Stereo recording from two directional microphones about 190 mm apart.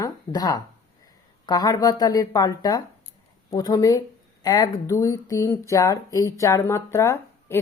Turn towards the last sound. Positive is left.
turn(degrees=15)  # may be behind; listen again after turning